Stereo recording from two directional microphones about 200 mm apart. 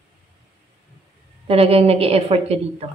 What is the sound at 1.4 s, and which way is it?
A woman's voice, 30° right (ahead or behind).